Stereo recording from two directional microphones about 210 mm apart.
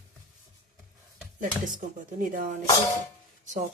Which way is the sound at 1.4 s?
40° right (ahead or behind).